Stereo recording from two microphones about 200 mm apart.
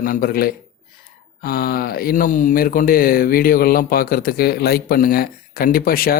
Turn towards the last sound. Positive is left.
turn(degrees=45)  # may be behind; listen again after turning